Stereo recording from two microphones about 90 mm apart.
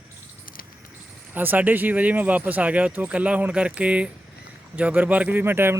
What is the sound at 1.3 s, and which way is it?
Speech, 20° right (ahead or behind).